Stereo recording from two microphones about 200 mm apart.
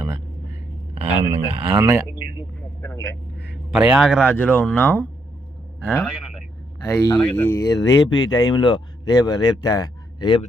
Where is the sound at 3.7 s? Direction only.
5° right (ahead or behind).